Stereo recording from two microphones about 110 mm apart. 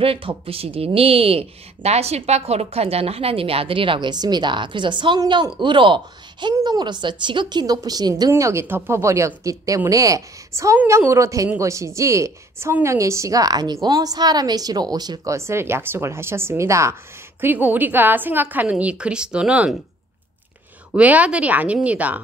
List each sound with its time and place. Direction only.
0.0 s a woman's voice: 55° right (ahead or behind)
6.5 s a woman's voice: 35° right (ahead or behind)
8.3 s a woman's voice: 25° right (ahead or behind)
17.4 s a woman's voice: 15° right (ahead or behind)
20.9 s a woman's voice: 15° right (ahead or behind)